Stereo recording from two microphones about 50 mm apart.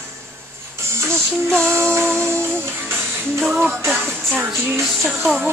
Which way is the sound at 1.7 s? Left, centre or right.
Right.